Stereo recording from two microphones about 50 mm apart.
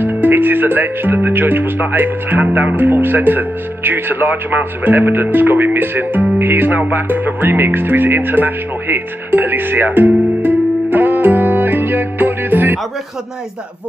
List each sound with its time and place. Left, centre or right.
0.0 s speech: right
6.3 s music: right